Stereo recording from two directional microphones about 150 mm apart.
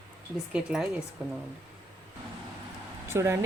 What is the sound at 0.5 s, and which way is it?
Speech, 5° right (ahead or behind).